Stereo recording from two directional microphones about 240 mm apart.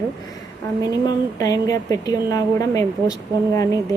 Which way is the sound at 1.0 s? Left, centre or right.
Centre.